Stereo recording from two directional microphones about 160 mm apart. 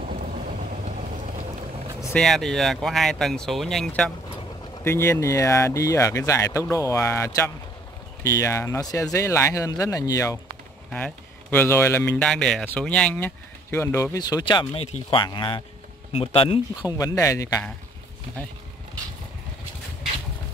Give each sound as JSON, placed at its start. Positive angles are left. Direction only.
{"t": 0.0, "sound": "vehicle", "side_deg": -60}
{"t": 2.1, "sound": "speech", "side_deg": 0}
{"t": 4.8, "sound": "speech", "side_deg": 15}
{"t": 10.9, "sound": "speech", "side_deg": 5}
{"t": 17.0, "sound": "speech", "side_deg": 20}